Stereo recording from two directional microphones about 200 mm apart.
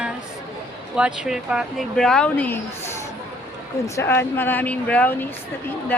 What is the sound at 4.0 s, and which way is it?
Speech, 15° left (ahead or behind).